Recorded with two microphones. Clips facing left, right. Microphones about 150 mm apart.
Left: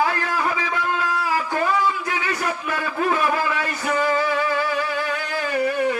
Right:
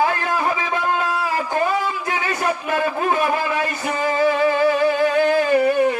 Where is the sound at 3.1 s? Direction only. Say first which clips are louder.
Left 1 dB; 25° right (ahead or behind).